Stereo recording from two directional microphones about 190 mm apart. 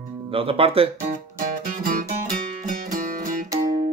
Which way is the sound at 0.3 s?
30° right (ahead or behind).